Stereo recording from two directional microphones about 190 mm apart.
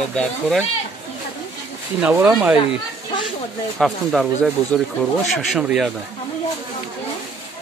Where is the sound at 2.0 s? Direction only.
10° right (ahead or behind).